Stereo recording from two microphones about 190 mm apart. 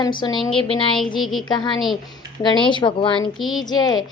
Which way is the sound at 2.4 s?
25° left (ahead or behind).